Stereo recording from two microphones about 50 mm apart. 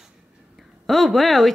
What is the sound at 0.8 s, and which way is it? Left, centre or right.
Speech, centre.